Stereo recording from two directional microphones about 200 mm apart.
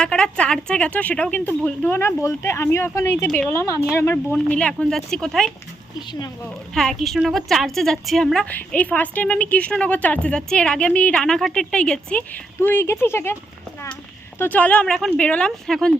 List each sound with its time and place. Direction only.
0.0 s a woman's voice: 5° left (ahead or behind)
6.1 s speech: 20° left (ahead or behind)
6.7 s a woman's voice: centre (ahead or behind)
14.3 s a woman's voice: 10° left (ahead or behind)